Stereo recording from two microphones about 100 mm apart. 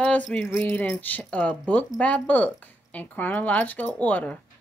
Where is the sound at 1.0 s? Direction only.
15° left (ahead or behind).